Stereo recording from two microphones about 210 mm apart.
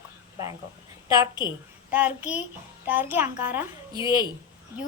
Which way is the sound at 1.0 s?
15° right (ahead or behind).